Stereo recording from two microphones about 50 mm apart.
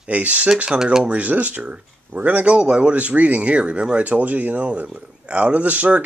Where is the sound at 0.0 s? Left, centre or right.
Right.